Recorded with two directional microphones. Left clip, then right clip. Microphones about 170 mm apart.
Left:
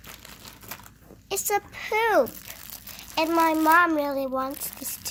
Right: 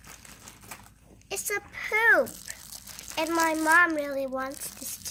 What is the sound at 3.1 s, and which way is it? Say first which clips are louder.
Speech: left 4 dB; 30° left (ahead or behind).